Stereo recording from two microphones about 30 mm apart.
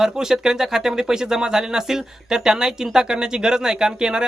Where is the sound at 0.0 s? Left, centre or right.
Centre.